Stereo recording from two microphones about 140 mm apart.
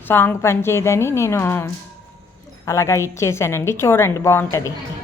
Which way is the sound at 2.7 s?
20° left (ahead or behind).